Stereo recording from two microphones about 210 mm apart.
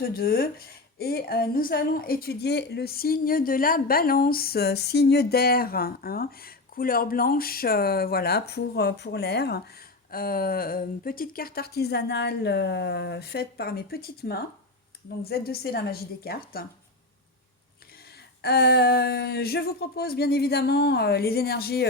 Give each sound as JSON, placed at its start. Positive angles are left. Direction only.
{"t": 0.0, "sound": "a woman's voice", "side_deg": 45}
{"t": 18.4, "sound": "a woman's voice", "side_deg": 50}